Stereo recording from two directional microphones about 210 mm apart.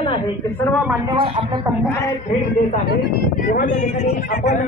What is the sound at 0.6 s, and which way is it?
Speech, 5° left (ahead or behind).